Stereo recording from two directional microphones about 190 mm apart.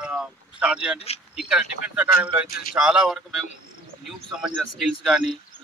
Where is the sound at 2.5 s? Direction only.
55° left (ahead or behind).